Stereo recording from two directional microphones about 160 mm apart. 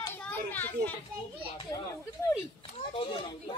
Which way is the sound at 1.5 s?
25° left (ahead or behind).